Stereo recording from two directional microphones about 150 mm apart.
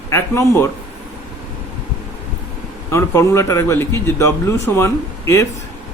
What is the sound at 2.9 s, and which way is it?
Speech, 20° left (ahead or behind).